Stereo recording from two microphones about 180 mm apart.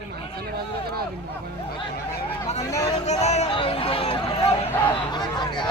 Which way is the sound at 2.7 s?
20° left (ahead or behind).